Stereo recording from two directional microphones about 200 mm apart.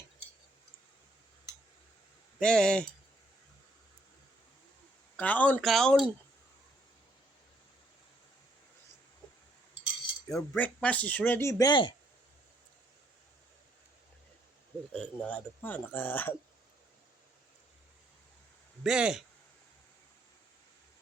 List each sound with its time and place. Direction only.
2.4 s speech: 5° left (ahead or behind)
5.1 s speech: 10° left (ahead or behind)
10.2 s speech: 10° left (ahead or behind)
14.9 s speech: 5° left (ahead or behind)
18.8 s speech: 5° right (ahead or behind)